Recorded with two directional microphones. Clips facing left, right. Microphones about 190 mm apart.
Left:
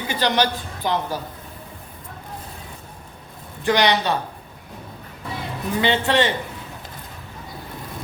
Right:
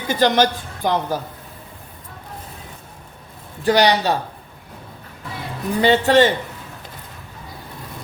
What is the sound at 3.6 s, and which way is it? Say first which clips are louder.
Speech: right 3 dB; 40° right (ahead or behind).